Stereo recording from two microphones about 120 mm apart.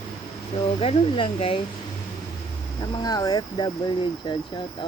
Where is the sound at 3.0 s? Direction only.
35° left (ahead or behind).